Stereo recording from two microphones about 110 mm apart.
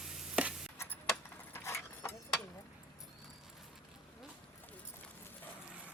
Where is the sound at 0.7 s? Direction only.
20° left (ahead or behind).